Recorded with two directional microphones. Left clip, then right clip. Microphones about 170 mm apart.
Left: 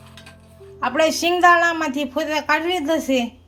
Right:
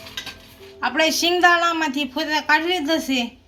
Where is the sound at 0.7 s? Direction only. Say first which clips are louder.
Left 1 dB; 35° left (ahead or behind).